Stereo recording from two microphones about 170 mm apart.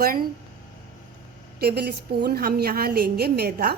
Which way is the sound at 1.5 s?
70° right (ahead or behind).